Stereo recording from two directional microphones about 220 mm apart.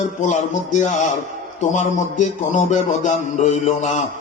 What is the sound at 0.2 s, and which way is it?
Speech, 35° left (ahead or behind).